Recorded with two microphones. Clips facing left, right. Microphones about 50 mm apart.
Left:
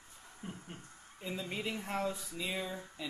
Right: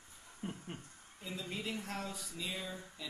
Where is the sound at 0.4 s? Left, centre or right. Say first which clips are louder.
Right 3 dB; right.